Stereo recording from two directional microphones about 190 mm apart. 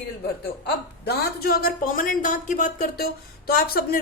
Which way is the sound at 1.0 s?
55° left (ahead or behind).